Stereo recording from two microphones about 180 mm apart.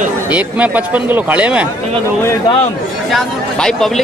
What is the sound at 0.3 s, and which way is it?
A man's voice, 10° right (ahead or behind).